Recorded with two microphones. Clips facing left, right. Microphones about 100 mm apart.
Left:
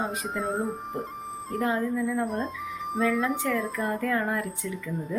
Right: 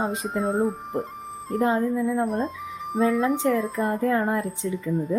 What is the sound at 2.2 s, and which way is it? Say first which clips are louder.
Music: right 4 dB; centre (ahead or behind).